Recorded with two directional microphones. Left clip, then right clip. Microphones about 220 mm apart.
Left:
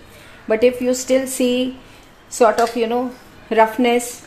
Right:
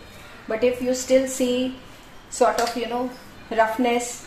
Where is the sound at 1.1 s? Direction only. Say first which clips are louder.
Left 1 dB; 50° left (ahead or behind).